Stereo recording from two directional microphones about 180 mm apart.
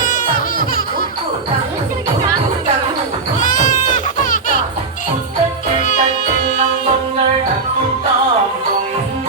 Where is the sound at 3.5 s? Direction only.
45° left (ahead or behind).